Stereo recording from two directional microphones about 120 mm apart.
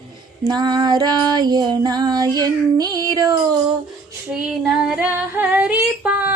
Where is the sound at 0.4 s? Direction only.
35° right (ahead or behind).